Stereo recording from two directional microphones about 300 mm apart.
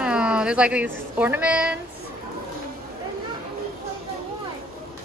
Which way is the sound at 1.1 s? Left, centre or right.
Centre.